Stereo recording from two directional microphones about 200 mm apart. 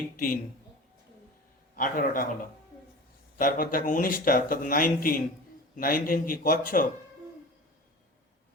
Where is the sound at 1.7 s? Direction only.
45° left (ahead or behind).